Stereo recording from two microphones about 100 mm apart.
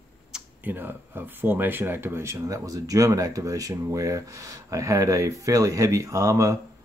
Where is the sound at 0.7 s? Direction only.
20° right (ahead or behind).